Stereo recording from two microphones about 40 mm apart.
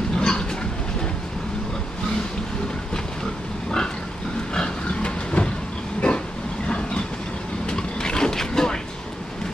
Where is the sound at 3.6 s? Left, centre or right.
Left.